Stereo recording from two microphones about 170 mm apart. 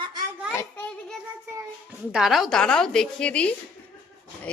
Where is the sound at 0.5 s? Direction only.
15° left (ahead or behind).